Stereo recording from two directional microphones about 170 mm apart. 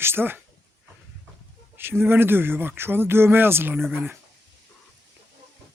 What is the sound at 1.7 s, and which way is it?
Speech, 10° right (ahead or behind).